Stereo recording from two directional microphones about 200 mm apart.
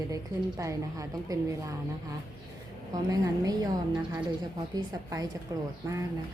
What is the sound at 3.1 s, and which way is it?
A woman's voice, 20° right (ahead or behind).